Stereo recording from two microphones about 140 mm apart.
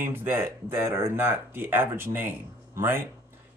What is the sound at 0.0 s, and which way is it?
Speech, 15° right (ahead or behind).